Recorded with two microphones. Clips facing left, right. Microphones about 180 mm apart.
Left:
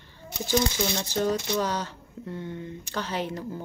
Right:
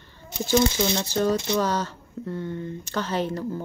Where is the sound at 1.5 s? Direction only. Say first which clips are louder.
Right 3 dB; 15° left (ahead or behind).